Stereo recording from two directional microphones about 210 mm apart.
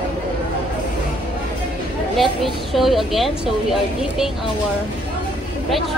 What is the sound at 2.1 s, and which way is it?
A woman's voice, centre (ahead or behind).